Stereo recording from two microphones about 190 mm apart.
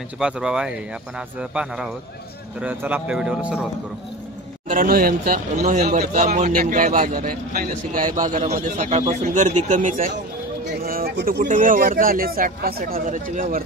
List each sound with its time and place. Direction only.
0.2 s a man's voice: 5° right (ahead or behind)
4.6 s speech: 45° right (ahead or behind)
5.6 s a man's voice: 35° right (ahead or behind)
10.8 s a sound: 50° right (ahead or behind)
11.4 s speech: 45° right (ahead or behind)